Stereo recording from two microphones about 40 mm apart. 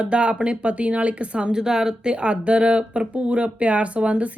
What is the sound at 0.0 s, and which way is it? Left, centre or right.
Speech, right.